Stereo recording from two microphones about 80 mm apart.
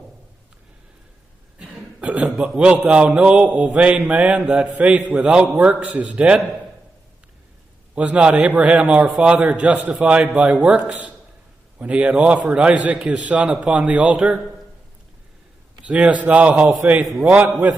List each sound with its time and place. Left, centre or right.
2.1 s a man's voice: centre
7.9 s a man's voice: centre
15.8 s a man's voice: centre